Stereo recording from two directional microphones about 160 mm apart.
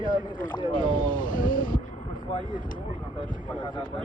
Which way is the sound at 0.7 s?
60° left (ahead or behind).